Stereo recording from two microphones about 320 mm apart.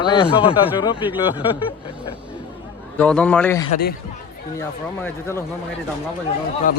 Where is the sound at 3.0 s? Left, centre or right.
Centre.